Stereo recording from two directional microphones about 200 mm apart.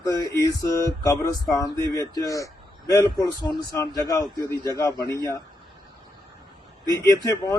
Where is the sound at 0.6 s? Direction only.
15° left (ahead or behind).